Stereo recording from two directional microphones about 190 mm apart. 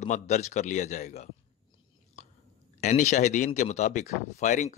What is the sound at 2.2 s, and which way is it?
Chewing, 35° left (ahead or behind).